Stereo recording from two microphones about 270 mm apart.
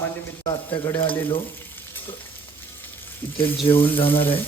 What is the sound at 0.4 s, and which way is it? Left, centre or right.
Stir, centre.